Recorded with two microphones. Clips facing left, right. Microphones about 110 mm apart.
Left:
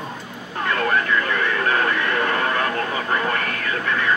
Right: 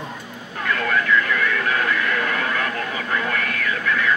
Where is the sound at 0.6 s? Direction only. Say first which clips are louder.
Even; 35° left (ahead or behind).